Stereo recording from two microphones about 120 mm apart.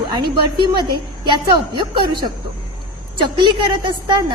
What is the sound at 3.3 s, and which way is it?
Speech, 40° right (ahead or behind).